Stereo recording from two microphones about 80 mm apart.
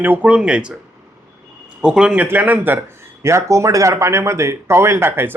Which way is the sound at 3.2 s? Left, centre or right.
Right.